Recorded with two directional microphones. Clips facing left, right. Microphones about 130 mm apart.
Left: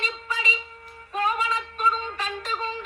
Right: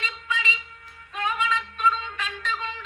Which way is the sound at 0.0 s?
35° left (ahead or behind).